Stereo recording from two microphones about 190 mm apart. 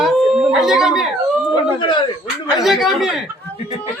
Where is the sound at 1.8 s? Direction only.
25° left (ahead or behind).